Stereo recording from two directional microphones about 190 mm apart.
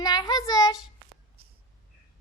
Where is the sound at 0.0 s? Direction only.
20° left (ahead or behind).